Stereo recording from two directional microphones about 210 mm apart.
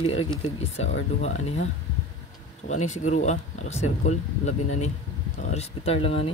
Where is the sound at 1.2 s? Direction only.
30° left (ahead or behind).